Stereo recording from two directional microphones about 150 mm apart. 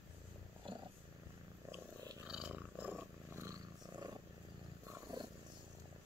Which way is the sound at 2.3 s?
10° right (ahead or behind).